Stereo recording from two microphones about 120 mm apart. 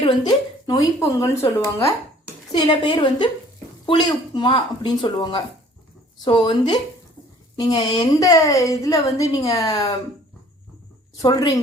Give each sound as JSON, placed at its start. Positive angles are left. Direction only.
{"t": 0.3, "sound": "a woman's voice", "side_deg": 30}
{"t": 2.5, "sound": "a woman's voice", "side_deg": 40}
{"t": 11.2, "sound": "speech", "side_deg": 30}